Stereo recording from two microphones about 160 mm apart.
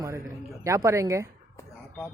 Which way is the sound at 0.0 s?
20° right (ahead or behind).